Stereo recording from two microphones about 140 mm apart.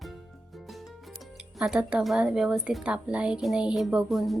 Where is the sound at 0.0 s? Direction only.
Centre (ahead or behind).